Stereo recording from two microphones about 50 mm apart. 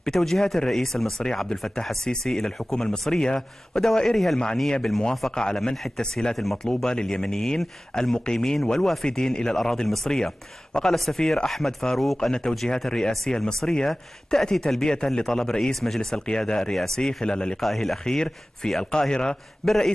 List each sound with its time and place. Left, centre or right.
0.0 s speech: centre
6.3 s speech: centre
6.7 s speech: centre
17.6 s speech: centre
18.1 s speech: centre